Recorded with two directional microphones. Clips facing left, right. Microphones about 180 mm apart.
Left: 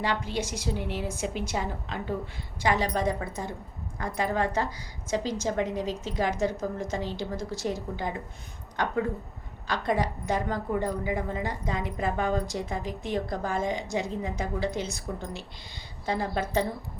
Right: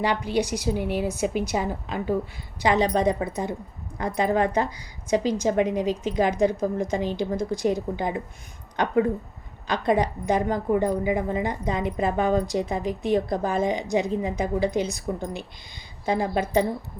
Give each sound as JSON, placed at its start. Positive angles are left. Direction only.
{"t": 0.0, "sound": "a woman's voice", "side_deg": -15}